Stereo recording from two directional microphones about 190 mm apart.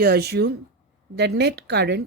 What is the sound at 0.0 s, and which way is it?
A woman's voice, 55° right (ahead or behind).